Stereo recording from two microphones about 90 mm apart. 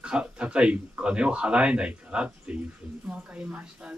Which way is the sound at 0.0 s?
10° right (ahead or behind).